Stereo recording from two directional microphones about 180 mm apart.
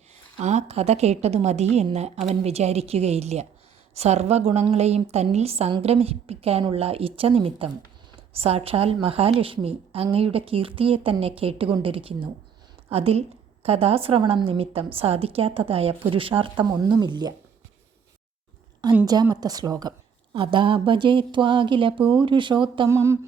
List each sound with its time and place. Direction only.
0.3 s a woman's voice: 35° right (ahead or behind)
19.0 s a woman's voice: 20° right (ahead or behind)
22.9 s a sound: 15° right (ahead or behind)